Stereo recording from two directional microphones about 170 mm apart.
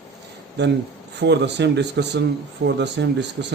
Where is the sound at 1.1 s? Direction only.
90° right.